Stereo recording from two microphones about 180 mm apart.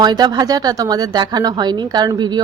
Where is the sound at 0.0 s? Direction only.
25° right (ahead or behind).